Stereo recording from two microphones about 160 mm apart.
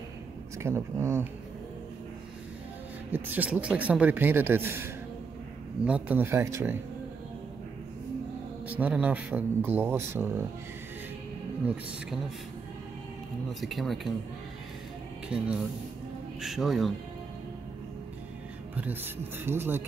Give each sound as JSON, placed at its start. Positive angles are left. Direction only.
{"t": 0.6, "sound": "a man's voice", "side_deg": -15}
{"t": 3.1, "sound": "a man's voice", "side_deg": -10}
{"t": 8.6, "sound": "a man's voice", "side_deg": -10}
{"t": 11.6, "sound": "a man's voice", "side_deg": -10}
{"t": 13.5, "sound": "speech", "side_deg": 0}
{"t": 15.2, "sound": "a man's voice", "side_deg": -5}
{"t": 19.4, "sound": "a man's voice", "side_deg": -15}